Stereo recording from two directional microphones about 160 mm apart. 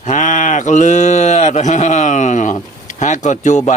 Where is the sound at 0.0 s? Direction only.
50° left (ahead or behind).